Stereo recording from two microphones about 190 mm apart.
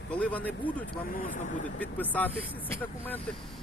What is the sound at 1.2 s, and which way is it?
Speech, 45° left (ahead or behind).